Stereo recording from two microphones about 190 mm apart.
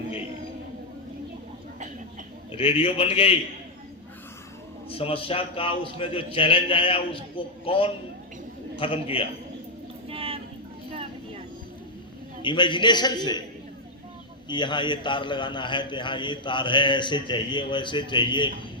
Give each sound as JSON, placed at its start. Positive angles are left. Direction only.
{"t": 2.5, "sound": "a man's voice", "side_deg": 25}
{"t": 4.9, "sound": "a man's voice", "side_deg": 30}
{"t": 10.1, "sound": "a sound", "side_deg": -30}
{"t": 10.9, "sound": "vehicle", "side_deg": -30}
{"t": 12.4, "sound": "a man's voice", "side_deg": 25}
{"t": 14.4, "sound": "a man's voice", "side_deg": 25}